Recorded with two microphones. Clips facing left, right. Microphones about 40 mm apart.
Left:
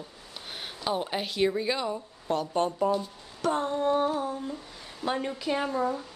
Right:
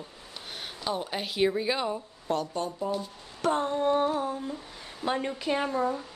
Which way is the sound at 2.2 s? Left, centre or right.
Centre.